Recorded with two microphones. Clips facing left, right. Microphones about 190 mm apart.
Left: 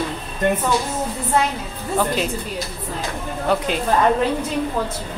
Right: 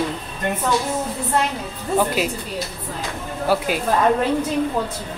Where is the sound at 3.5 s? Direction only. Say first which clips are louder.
Even; 5° right (ahead or behind).